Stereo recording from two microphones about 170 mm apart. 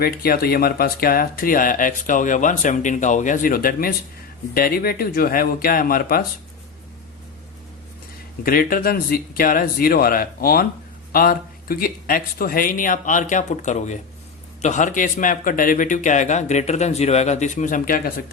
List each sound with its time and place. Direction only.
0.0 s speech: 60° left (ahead or behind)
8.4 s speech: 60° left (ahead or behind)